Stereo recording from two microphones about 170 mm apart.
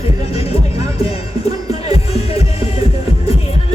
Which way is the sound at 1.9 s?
35° left (ahead or behind).